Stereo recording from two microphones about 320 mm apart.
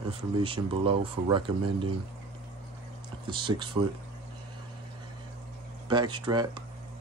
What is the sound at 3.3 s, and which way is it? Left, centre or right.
Speech, centre.